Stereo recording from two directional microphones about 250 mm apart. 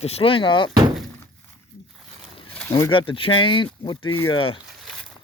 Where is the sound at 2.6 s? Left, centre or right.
Centre.